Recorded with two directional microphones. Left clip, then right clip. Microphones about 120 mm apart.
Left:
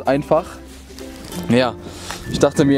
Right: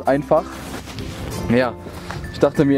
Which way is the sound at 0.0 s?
45° left (ahead or behind).